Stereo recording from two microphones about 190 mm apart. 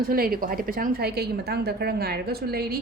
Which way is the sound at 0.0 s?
50° right (ahead or behind).